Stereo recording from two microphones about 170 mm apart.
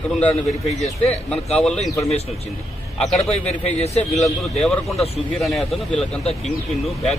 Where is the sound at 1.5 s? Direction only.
5° left (ahead or behind).